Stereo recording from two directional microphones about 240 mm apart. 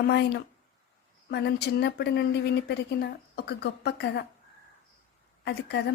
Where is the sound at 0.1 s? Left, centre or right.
Left.